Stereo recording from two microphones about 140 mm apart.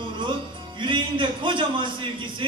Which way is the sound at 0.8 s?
35° right (ahead or behind).